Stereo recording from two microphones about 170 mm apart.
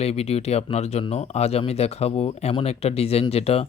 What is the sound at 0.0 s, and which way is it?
Speech, 35° left (ahead or behind).